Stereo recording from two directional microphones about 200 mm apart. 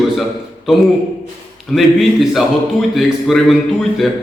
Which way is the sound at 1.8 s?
Centre (ahead or behind).